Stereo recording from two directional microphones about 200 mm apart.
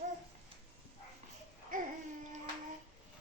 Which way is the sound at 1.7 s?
45° right (ahead or behind).